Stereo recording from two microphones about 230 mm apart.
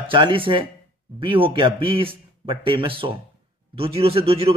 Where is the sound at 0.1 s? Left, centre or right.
Right.